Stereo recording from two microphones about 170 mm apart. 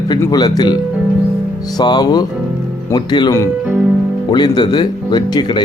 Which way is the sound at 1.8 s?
25° left (ahead or behind).